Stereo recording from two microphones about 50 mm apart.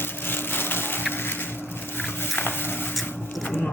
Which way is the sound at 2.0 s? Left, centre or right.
Left.